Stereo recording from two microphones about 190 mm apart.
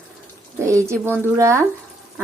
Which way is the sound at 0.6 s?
15° right (ahead or behind).